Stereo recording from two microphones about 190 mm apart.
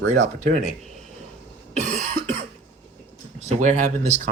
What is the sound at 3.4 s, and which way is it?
Speech, 40° right (ahead or behind).